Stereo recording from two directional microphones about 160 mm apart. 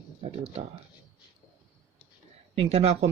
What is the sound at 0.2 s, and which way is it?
Speech, 40° right (ahead or behind).